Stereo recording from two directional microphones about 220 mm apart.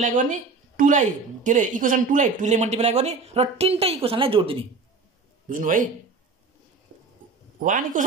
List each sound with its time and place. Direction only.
0.0 s a woman's voice: 35° right (ahead or behind)
5.5 s a woman's voice: 35° right (ahead or behind)
7.6 s a woman's voice: 35° right (ahead or behind)